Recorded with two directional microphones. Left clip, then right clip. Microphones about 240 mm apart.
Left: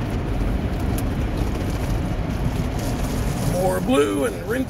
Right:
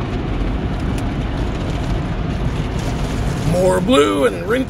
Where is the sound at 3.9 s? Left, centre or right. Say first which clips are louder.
Right 5 dB; right.